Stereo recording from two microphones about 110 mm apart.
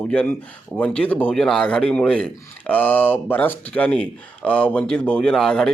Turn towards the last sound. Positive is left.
turn(degrees=5)  # may be behind; listen again after turning